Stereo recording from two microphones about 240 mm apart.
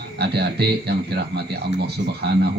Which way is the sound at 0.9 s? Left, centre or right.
Right.